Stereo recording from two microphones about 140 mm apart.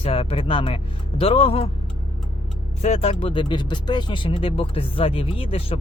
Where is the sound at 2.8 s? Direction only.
45° left (ahead or behind).